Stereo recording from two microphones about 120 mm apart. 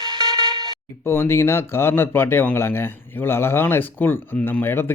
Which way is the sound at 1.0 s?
20° left (ahead or behind).